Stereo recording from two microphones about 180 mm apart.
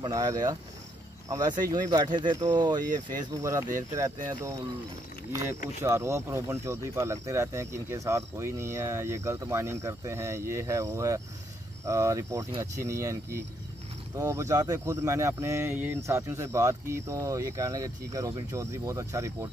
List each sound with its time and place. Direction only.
0.0 s speech: 20° right (ahead or behind)
1.6 s speech: 20° right (ahead or behind)